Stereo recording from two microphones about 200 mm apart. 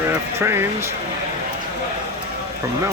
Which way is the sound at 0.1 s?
10° right (ahead or behind).